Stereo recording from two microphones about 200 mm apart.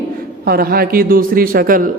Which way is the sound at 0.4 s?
50° right (ahead or behind).